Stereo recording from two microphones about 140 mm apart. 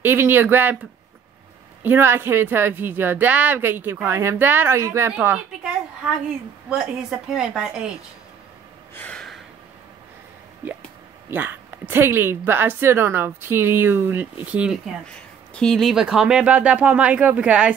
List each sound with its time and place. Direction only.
0.0 s a woman's voice: 15° right (ahead or behind)
1.8 s a woman's voice: 15° right (ahead or behind)
6.7 s a woman's voice: 5° right (ahead or behind)
8.9 s gasp: 10° left (ahead or behind)
11.2 s a woman's voice: 15° right (ahead or behind)
15.5 s a woman's voice: 5° left (ahead or behind)